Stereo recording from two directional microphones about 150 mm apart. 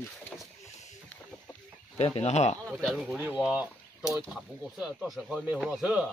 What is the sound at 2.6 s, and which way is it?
Speech, centre (ahead or behind).